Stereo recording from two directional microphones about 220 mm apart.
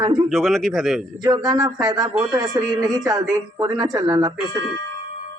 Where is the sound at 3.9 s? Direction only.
15° right (ahead or behind).